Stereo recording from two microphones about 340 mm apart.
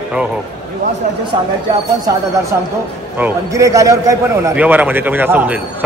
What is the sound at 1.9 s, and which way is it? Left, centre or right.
A man's voice, centre.